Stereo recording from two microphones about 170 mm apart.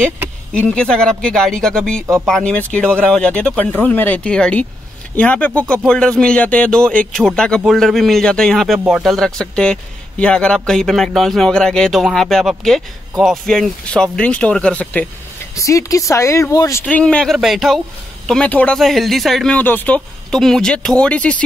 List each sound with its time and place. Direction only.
0.5 s speech: 5° left (ahead or behind)
15.5 s speech: 20° left (ahead or behind)
16.8 s speech: 5° left (ahead or behind)